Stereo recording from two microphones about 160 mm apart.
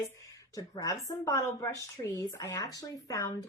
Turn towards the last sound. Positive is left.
turn(degrees=20)  # may be behind; listen again after turning